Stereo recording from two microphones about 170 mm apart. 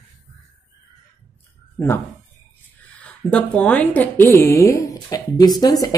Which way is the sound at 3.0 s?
5° left (ahead or behind).